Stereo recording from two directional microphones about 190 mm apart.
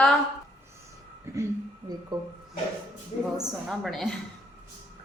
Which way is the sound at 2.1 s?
20° right (ahead or behind).